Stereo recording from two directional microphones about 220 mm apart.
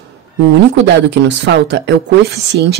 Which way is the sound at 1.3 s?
55° right (ahead or behind).